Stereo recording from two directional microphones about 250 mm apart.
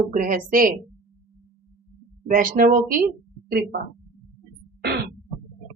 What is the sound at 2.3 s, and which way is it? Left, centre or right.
Speech, right.